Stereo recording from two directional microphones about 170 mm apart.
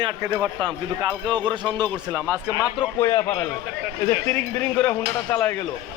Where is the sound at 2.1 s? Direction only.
10° left (ahead or behind).